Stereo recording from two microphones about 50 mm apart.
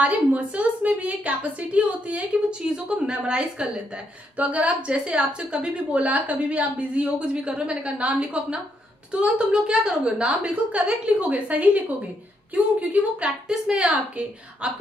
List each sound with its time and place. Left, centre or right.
0.0 s a woman's voice: right
4.4 s a woman's voice: right
13.5 s a woman's voice: centre
13.8 s a woman's voice: right